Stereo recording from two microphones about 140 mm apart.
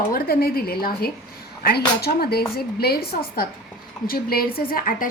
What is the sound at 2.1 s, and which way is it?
A woman's voice, 90° left.